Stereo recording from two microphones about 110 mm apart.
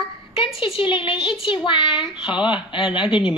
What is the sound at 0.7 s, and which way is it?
A woman's voice, 50° left (ahead or behind).